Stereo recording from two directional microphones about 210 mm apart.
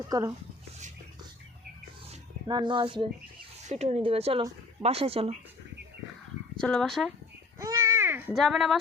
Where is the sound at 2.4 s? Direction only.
20° right (ahead or behind).